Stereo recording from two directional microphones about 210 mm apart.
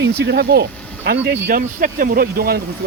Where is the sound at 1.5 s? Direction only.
40° right (ahead or behind).